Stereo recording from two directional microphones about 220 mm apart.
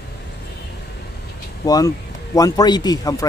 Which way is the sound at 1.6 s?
15° left (ahead or behind).